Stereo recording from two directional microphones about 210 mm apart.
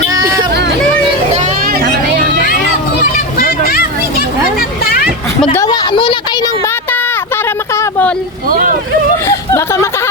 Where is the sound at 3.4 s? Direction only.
45° left (ahead or behind).